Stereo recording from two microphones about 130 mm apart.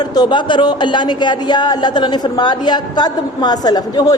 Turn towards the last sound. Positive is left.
turn(degrees=30)  # may be behind; listen again after turning